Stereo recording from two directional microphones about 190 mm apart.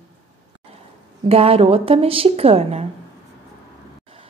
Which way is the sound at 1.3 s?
30° right (ahead or behind).